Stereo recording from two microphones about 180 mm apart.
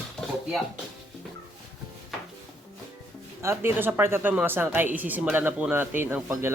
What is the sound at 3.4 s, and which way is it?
Speech, 10° right (ahead or behind).